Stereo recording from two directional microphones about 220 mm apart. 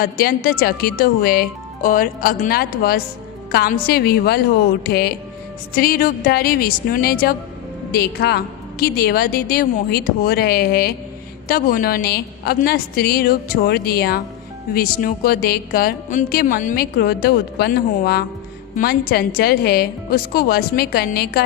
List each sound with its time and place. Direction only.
0.0 s a woman's voice: 45° left (ahead or behind)